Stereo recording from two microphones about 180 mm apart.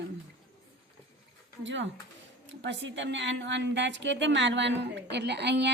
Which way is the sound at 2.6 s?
80° right.